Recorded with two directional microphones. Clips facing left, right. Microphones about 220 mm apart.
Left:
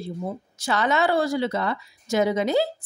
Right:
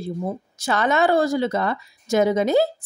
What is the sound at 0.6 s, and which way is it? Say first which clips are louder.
Speech: right 3 dB; 50° right (ahead or behind).